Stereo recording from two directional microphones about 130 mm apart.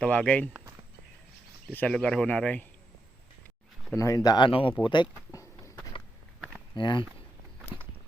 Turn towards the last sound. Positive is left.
turn(degrees=40)  # may be behind; listen again after turning